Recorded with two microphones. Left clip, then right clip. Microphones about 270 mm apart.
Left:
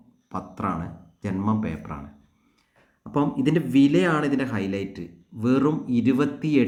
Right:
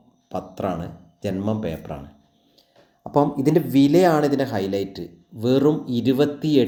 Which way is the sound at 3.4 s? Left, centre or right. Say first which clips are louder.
Right 2 dB; centre.